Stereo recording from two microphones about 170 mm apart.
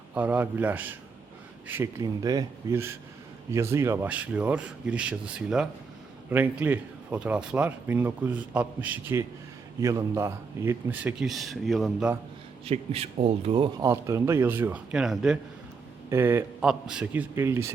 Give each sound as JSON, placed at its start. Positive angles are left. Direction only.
{"t": 0.1, "sound": "a man's voice", "side_deg": -10}
{"t": 12.6, "sound": "speech", "side_deg": -35}
{"t": 13.8, "sound": "speech", "side_deg": -15}
{"t": 16.0, "sound": "speech", "side_deg": -15}